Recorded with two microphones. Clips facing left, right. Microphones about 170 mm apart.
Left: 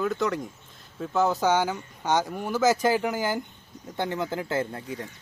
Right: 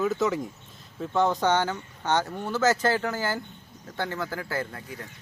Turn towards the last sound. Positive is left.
turn(degrees=25)  # may be behind; listen again after turning